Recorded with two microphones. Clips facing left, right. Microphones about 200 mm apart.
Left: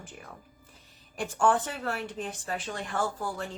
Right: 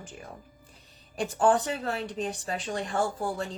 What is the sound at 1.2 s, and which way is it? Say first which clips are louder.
A woman's voice: right 2 dB; 15° right (ahead or behind).